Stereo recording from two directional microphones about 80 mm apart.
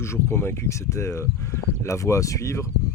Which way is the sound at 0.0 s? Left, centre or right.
Left.